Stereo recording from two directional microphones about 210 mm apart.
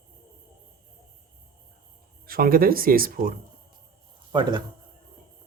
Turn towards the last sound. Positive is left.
turn(degrees=-20)  # may be behind; listen again after turning